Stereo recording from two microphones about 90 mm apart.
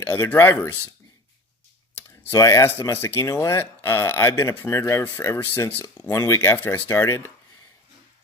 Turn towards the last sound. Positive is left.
turn(degrees=30)  # may be behind; listen again after turning